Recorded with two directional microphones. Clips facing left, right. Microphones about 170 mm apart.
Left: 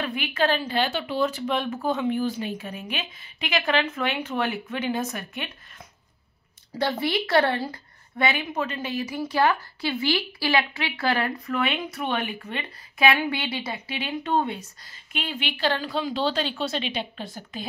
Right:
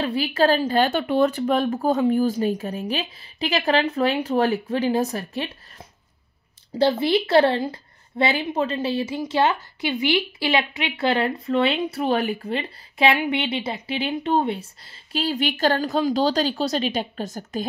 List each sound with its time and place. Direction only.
0.0 s a woman's voice: 35° right (ahead or behind)
6.8 s a woman's voice: 25° right (ahead or behind); by 17.6 s 45° right (ahead or behind)